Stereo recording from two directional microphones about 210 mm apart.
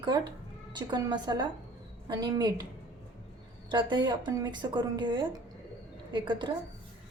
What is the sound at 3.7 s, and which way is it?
Speech, 20° right (ahead or behind).